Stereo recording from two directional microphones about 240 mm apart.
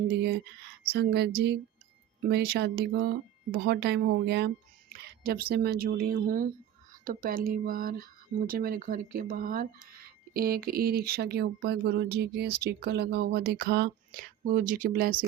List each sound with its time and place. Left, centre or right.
0.1 s speech: right